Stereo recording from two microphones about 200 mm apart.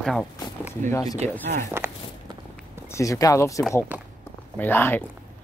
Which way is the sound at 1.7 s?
10° right (ahead or behind).